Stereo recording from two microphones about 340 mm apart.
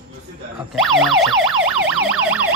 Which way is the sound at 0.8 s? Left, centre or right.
Centre.